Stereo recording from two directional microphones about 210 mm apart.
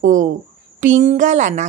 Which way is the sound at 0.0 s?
40° right (ahead or behind).